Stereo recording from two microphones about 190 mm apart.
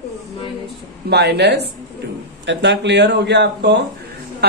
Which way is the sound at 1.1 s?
60° right (ahead or behind).